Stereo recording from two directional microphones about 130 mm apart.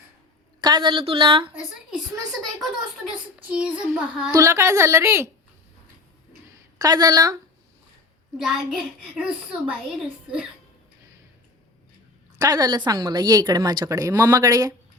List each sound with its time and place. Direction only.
0.6 s a woman's voice: 35° right (ahead or behind)
3.1 s a woman's voice: 10° right (ahead or behind)
4.3 s speech: 25° right (ahead or behind)
6.7 s speech: 30° right (ahead or behind)
8.4 s a woman's voice: 5° right (ahead or behind)
12.4 s speech: 30° right (ahead or behind)